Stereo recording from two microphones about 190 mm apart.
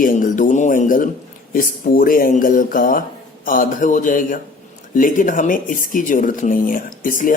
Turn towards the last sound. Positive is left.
turn(degrees=45)  # may be behind; listen again after turning